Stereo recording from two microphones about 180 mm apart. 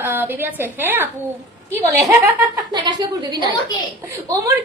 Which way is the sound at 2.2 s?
20° right (ahead or behind).